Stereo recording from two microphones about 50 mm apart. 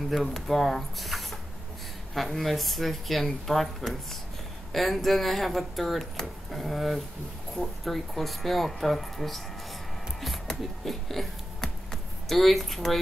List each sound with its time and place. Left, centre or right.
0.1 s speech: centre
11.6 s a sound: centre
12.3 s speech: centre